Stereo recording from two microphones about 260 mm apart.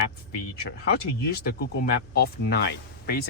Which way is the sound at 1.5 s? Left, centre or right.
Left.